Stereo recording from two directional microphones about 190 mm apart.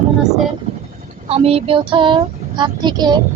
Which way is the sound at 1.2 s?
30° right (ahead or behind).